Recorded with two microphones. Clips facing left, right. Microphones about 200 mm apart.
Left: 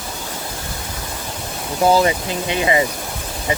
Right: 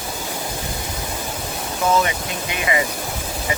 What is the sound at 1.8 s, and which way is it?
Speech, 35° left (ahead or behind).